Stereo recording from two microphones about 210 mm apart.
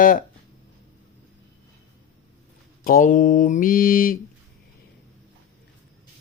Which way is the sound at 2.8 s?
40° left (ahead or behind).